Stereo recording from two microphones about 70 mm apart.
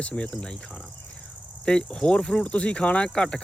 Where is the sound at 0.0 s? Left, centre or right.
Centre.